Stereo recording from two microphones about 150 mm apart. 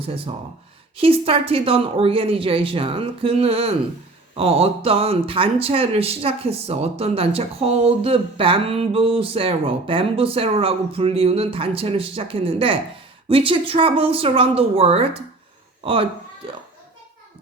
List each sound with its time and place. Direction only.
0.9 s a man's voice: 40° right (ahead or behind)